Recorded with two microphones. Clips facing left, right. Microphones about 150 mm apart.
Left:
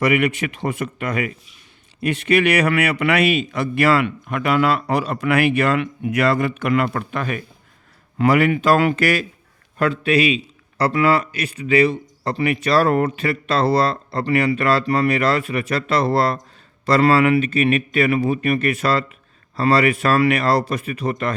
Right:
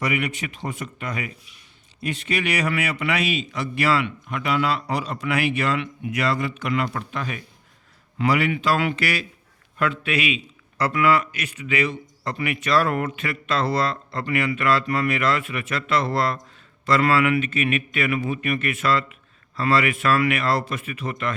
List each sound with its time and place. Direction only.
0.0 s a man's voice: 65° left (ahead or behind); by 9.2 s 45° left (ahead or behind)
9.7 s a man's voice: 35° left (ahead or behind)